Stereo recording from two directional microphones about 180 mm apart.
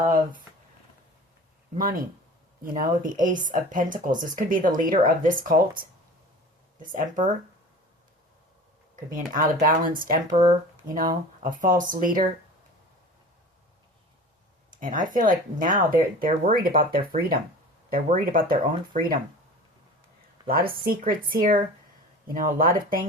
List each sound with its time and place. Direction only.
1.8 s speech: 55° right (ahead or behind)
6.9 s speech: 50° right (ahead or behind)
9.1 s speech: 50° right (ahead or behind)
14.7 s speech: 50° right (ahead or behind)
20.5 s speech: 55° right (ahead or behind)